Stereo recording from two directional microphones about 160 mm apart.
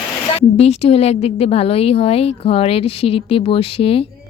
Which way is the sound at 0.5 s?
40° left (ahead or behind).